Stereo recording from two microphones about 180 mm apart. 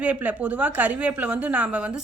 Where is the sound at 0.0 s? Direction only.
10° right (ahead or behind).